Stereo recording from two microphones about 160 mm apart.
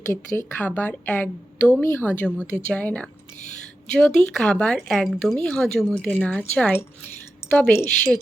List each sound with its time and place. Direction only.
0.0 s a woman's voice: 15° left (ahead or behind)